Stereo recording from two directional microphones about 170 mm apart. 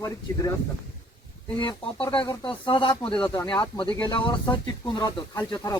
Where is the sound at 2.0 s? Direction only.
25° left (ahead or behind).